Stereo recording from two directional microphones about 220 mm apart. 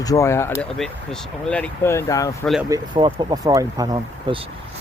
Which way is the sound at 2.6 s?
20° right (ahead or behind).